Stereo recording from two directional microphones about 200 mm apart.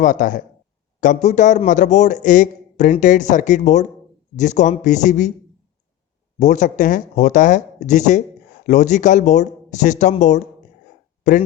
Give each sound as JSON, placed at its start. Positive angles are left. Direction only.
{"t": 0.0, "sound": "a man's voice", "side_deg": 40}
{"t": 6.4, "sound": "a man's voice", "side_deg": 40}